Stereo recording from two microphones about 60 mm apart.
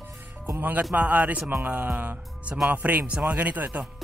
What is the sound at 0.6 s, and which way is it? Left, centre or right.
Speech, right.